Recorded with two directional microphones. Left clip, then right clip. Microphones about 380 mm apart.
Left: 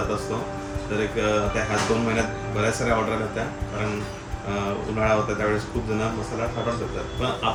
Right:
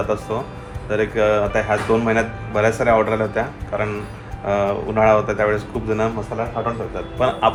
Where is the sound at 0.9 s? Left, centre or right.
Centre.